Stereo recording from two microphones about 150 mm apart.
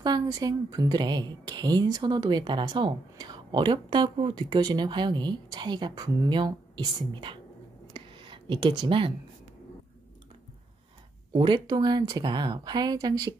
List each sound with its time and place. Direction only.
0.0 s a woman's voice: 25° right (ahead or behind)
7.9 s a sound: 35° right (ahead or behind)
11.3 s a woman's voice: 30° right (ahead or behind)